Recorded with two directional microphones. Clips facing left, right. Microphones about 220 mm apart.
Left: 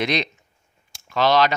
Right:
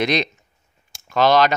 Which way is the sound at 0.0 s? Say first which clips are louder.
Right 3 dB; 45° right (ahead or behind).